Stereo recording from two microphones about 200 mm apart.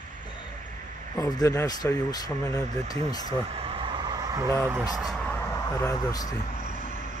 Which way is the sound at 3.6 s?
25° right (ahead or behind).